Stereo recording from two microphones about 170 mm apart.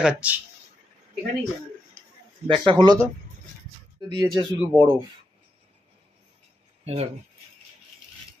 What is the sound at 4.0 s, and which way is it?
Speech, 25° right (ahead or behind).